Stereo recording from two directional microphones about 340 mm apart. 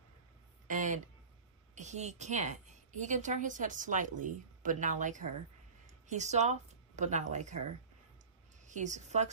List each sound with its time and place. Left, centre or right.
0.7 s a woman's voice: right
8.6 s a woman's voice: right